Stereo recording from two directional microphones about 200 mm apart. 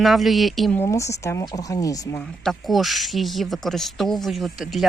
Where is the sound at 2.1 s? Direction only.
Centre (ahead or behind).